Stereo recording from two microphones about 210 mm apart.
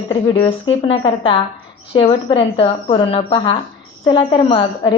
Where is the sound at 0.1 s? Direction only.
25° left (ahead or behind).